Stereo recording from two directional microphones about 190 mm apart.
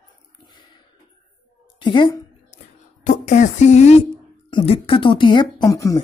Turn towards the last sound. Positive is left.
turn(degrees=15)  # may be behind; listen again after turning